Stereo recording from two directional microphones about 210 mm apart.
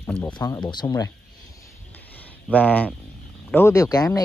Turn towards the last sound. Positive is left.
turn(degrees=15)  # may be behind; listen again after turning